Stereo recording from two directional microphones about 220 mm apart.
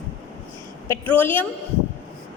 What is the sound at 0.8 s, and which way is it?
Speech, 10° left (ahead or behind).